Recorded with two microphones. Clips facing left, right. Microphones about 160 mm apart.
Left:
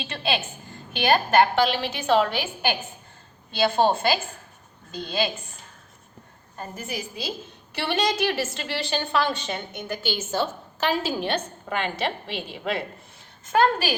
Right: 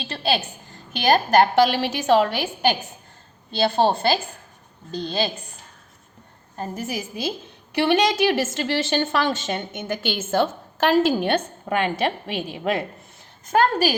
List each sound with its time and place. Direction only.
0.0 s a woman's voice: 35° right (ahead or behind)
3.6 s a woman's voice: 35° right (ahead or behind)
6.6 s a woman's voice: 45° right (ahead or behind)
13.5 s a woman's voice: 45° right (ahead or behind)